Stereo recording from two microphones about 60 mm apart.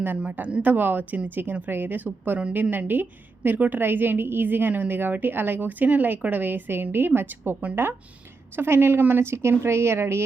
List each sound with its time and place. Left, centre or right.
0.2 s a woman's voice: right